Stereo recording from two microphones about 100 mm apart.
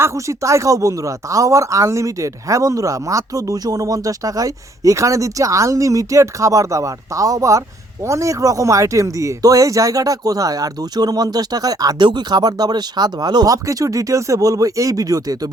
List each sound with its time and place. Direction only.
0.0 s speech: 30° right (ahead or behind)